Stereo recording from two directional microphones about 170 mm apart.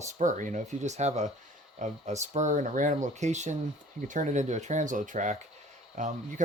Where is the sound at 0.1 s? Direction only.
45° right (ahead or behind).